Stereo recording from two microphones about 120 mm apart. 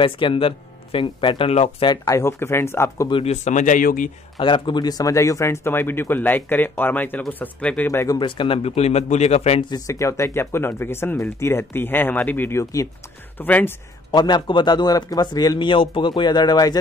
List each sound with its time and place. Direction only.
0.0 s speech: 45° left (ahead or behind)
1.5 s a man's voice: 60° left (ahead or behind)
1.9 s speech: 25° left (ahead or behind)
3.3 s speech: 85° left
4.4 s speech: 45° left (ahead or behind); by 8.2 s 20° left (ahead or behind)
8.2 s a man's voice: 45° left (ahead or behind)
9.7 s speech: 25° left (ahead or behind)
14.1 s a man's voice: 40° left (ahead or behind)